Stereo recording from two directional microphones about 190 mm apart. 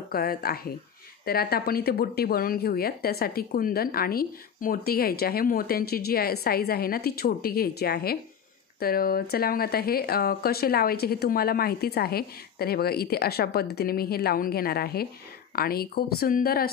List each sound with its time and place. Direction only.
0.1 s speech: 50° left (ahead or behind)